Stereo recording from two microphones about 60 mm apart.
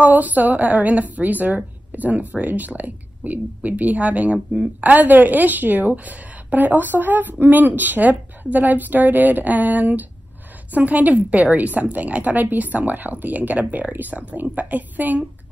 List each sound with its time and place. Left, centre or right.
0.0 s speech: right